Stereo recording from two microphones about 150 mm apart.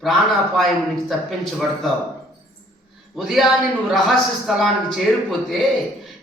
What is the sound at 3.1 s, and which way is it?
Speech, centre (ahead or behind).